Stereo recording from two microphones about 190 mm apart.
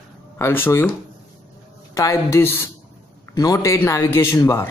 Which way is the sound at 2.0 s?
15° left (ahead or behind).